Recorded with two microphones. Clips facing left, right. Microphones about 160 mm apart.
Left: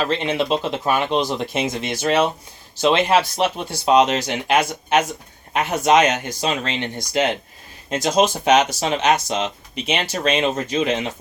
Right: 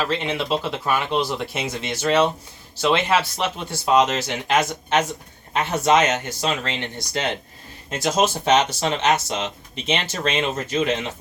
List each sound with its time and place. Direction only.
0.1 s speech: 20° left (ahead or behind)